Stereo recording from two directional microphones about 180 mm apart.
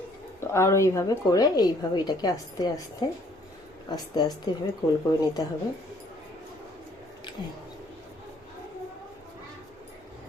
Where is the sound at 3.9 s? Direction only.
20° left (ahead or behind).